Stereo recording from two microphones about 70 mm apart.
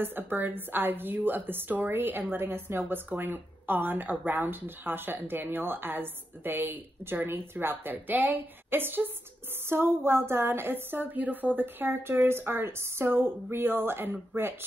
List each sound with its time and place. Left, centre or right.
0.0 s a woman's voice: right